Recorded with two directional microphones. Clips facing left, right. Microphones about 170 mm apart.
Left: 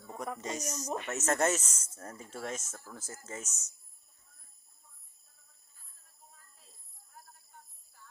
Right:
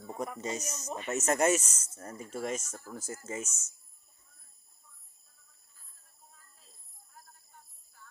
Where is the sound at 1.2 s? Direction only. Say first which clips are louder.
Right 3 dB; 15° right (ahead or behind).